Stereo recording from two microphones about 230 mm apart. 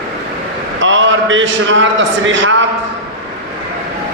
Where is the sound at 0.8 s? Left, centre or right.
Right.